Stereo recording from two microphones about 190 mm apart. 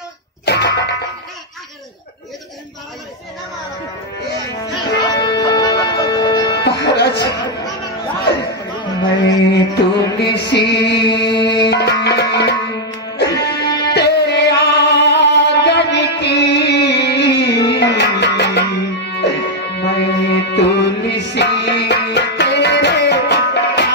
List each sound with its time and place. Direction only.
0.5 s music: 60° left (ahead or behind)
4.9 s music: 20° left (ahead or behind)
6.6 s music: 60° left (ahead or behind)
9.0 s music: 60° left (ahead or behind)